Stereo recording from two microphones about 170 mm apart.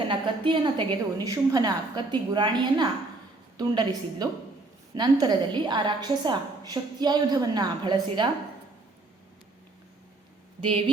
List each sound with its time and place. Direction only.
0.1 s a woman's voice: 30° right (ahead or behind)
10.6 s speech: 35° right (ahead or behind)